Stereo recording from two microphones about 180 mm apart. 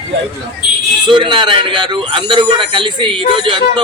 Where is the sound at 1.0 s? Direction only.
25° right (ahead or behind).